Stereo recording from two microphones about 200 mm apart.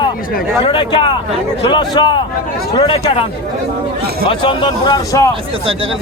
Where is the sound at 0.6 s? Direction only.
25° left (ahead or behind).